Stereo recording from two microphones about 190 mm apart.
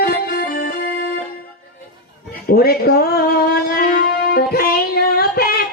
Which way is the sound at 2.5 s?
55° left (ahead or behind).